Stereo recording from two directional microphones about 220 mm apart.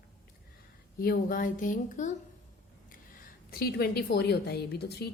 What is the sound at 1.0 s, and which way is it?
A woman's voice, 40° left (ahead or behind).